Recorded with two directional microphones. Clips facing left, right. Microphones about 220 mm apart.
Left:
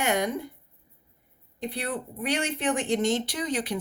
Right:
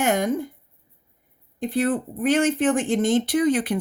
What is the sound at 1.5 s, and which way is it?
Speech, 50° right (ahead or behind).